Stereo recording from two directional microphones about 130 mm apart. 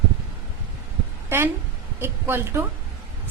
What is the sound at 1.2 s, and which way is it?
A woman's voice, 20° right (ahead or behind).